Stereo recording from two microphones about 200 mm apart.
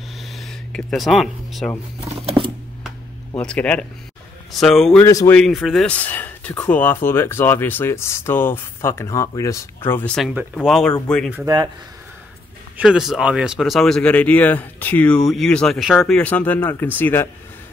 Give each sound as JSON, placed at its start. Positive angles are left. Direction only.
{"t": 0.2, "sound": "a sound", "side_deg": 0}
{"t": 2.2, "sound": "a sound", "side_deg": -25}
{"t": 3.3, "sound": "speech", "side_deg": 5}
{"t": 5.0, "sound": "speech", "side_deg": 15}
{"t": 5.4, "sound": "speech", "side_deg": 0}
{"t": 11.3, "sound": "speech", "side_deg": -15}
{"t": 12.7, "sound": "speech", "side_deg": -5}